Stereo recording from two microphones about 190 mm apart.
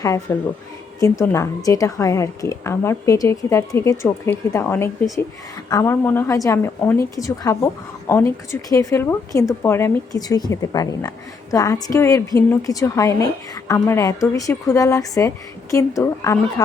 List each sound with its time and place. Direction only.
0.0 s a woman's voice: 15° left (ahead or behind)